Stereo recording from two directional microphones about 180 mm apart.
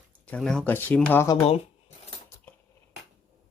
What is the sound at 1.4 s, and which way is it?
Shuffling cards, 35° left (ahead or behind).